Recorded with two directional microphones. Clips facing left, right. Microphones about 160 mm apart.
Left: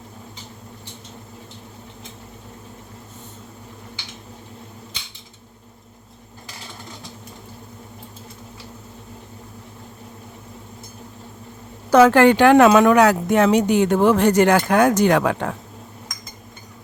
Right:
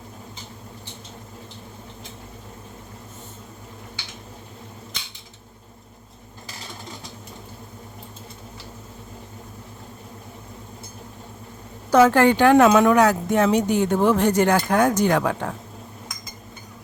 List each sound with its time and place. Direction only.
11.9 s speech: 75° left (ahead or behind)